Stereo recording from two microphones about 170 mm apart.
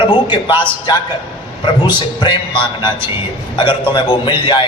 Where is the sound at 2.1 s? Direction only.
30° left (ahead or behind).